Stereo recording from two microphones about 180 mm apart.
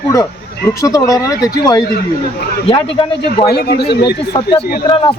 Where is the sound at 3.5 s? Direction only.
60° left (ahead or behind).